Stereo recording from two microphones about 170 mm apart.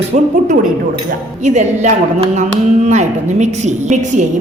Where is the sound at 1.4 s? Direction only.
45° right (ahead or behind).